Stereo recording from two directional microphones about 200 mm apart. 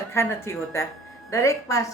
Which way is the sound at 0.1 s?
15° left (ahead or behind).